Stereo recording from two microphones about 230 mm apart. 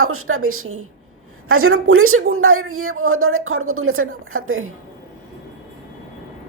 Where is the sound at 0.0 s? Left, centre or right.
Right.